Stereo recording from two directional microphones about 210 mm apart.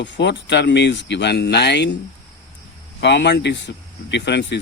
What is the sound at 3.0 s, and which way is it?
Speech, 55° left (ahead or behind).